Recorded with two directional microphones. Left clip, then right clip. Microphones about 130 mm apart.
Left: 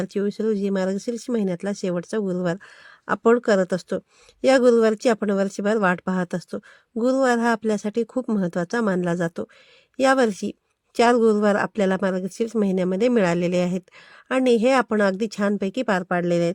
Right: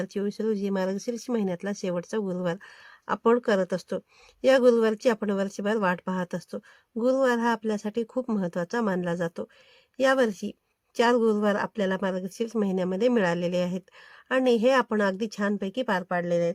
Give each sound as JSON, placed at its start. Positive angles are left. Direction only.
{"t": 0.0, "sound": "speech", "side_deg": 35}